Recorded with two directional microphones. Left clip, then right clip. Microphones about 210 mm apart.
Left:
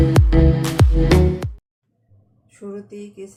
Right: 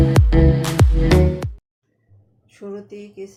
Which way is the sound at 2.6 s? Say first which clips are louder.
Right 1 dB; 25° right (ahead or behind).